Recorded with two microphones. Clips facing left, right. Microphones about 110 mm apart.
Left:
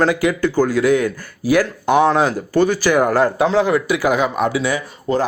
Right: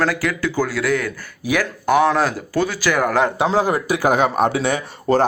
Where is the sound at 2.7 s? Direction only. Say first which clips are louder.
Left 5 dB; 15° left (ahead or behind).